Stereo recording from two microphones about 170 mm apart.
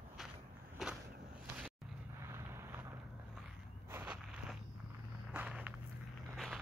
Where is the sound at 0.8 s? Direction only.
Centre (ahead or behind).